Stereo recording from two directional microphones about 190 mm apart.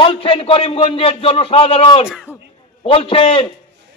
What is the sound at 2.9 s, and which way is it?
Speech, 30° left (ahead or behind).